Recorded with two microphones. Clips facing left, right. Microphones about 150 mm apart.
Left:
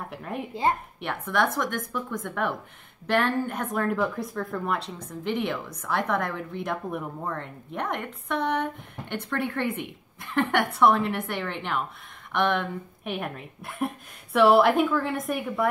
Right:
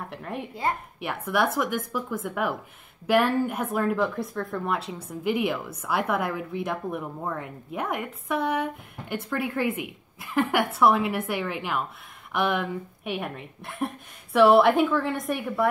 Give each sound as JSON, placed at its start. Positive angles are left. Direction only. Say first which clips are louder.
{"t": 0.1, "sound": "speech", "louder": "left 1 dB", "side_deg": 0}